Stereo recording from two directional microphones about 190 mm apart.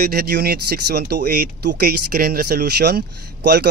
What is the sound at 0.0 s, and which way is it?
Speech, 55° right (ahead or behind).